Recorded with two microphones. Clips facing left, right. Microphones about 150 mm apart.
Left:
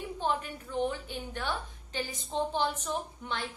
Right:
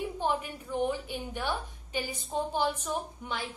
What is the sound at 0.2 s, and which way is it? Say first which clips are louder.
A woman's voice: left 1 dB; 10° right (ahead or behind).